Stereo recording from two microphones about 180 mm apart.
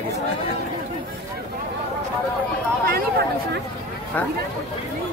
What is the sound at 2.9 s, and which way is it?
Speech, 60° right (ahead or behind).